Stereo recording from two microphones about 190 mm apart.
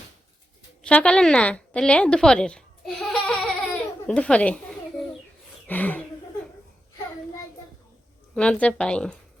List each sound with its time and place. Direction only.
0.8 s a woman's voice: 5° left (ahead or behind)
5.6 s speech: 10° left (ahead or behind)
8.4 s speech: 5° left (ahead or behind)